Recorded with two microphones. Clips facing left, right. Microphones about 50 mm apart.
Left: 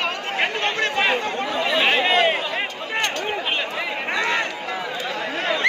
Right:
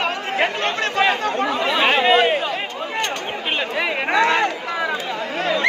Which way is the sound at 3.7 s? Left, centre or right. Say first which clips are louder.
Right 4 dB; right.